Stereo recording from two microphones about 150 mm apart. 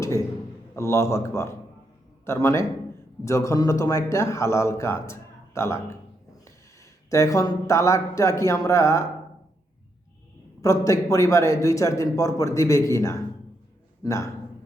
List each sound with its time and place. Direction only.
0.8 s speech: 20° left (ahead or behind)
10.6 s a man's voice: 20° left (ahead or behind)